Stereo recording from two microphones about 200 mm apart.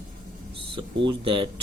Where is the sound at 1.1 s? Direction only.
25° right (ahead or behind).